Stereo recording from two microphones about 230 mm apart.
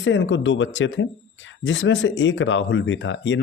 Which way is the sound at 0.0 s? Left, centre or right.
Left.